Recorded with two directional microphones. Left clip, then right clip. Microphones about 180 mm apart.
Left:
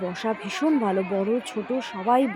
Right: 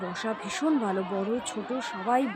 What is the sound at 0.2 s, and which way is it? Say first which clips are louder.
Speech: left 3 dB; 20° left (ahead or behind).